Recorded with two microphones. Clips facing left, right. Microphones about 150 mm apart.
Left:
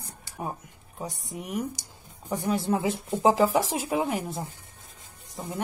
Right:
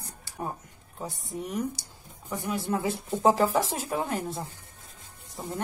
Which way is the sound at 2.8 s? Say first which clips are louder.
Right 2 dB; 15° left (ahead or behind).